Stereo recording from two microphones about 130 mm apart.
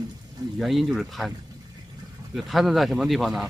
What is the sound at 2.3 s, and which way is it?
Speech, centre (ahead or behind).